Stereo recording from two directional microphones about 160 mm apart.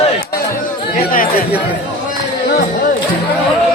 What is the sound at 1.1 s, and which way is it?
Speech, 60° left (ahead or behind).